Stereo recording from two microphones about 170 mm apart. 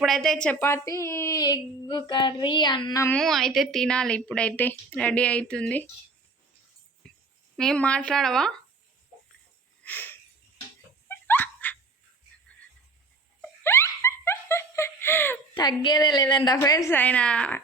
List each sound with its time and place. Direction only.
0.0 s a woman's voice: centre (ahead or behind); by 3.1 s 25° left (ahead or behind)
3.1 s a woman's voice: centre (ahead or behind)
7.0 s tambourine: 5° left (ahead or behind)
7.5 s a woman's voice: 5° left (ahead or behind)
11.1 s dog: 10° left (ahead or behind)
13.7 s laughter: 15° left (ahead or behind)
15.5 s a woman's voice: 25° left (ahead or behind); by 17.6 s 5° left (ahead or behind)